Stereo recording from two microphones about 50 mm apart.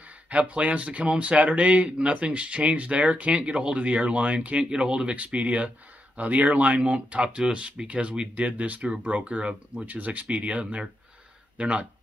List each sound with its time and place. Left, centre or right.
0.3 s speech: right
9.8 s speech: right